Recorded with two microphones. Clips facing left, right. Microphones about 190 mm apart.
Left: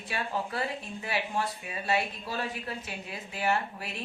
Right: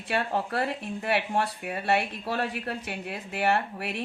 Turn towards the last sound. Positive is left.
turn(degrees=-65)  # may be behind; listen again after turning